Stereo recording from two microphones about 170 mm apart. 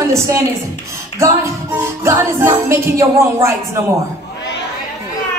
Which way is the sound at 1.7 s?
15° right (ahead or behind).